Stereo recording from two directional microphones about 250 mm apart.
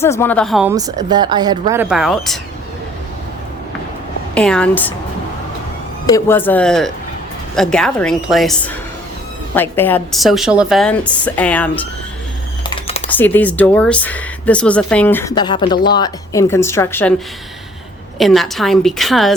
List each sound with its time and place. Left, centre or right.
0.0 s a woman's voice: centre
0.7 s speech: centre
4.4 s a woman's voice: centre
6.1 s a woman's voice: centre
12.6 s typing: centre
13.1 s speech: centre
18.2 s a woman's voice: centre